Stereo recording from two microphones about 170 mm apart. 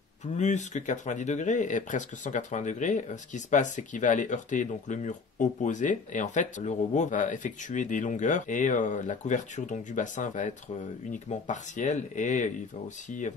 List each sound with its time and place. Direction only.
0.4 s speech: 45° left (ahead or behind)